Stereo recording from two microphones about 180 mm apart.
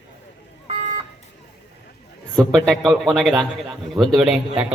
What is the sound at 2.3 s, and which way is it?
A man's voice, centre (ahead or behind).